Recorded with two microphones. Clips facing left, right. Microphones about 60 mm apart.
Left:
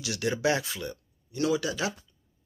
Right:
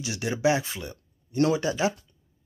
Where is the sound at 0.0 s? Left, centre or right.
Centre.